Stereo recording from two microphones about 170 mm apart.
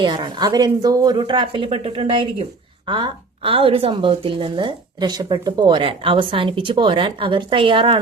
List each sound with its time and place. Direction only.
0.0 s speech: 25° right (ahead or behind)